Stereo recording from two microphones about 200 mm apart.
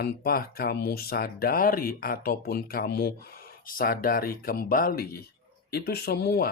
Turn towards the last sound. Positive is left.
turn(degrees=55)  # may be behind; listen again after turning